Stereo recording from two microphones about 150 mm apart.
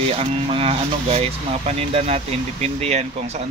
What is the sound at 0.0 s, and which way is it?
Speech, 40° right (ahead or behind).